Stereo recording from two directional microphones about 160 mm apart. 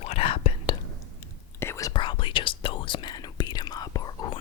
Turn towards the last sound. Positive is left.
turn(degrees=25)  # may be behind; listen again after turning